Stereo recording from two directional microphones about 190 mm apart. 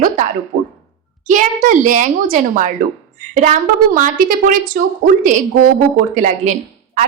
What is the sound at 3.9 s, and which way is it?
A woman's voice, 45° right (ahead or behind).